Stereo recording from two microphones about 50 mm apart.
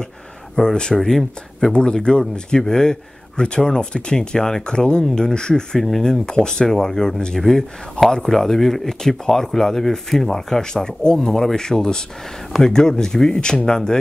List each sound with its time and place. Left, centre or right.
0.6 s speech: centre